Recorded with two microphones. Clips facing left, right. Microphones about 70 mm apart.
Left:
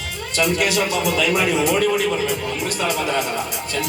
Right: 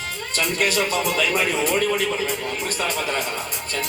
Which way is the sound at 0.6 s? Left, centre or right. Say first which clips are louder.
Left 2 dB; right.